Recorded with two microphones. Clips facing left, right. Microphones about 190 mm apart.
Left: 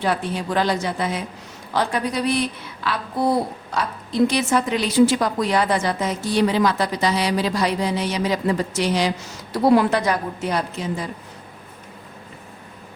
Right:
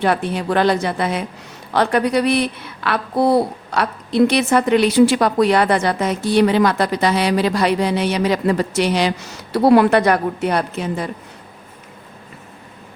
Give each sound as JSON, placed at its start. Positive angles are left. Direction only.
{"t": 0.0, "sound": "a woman's voice", "side_deg": -60}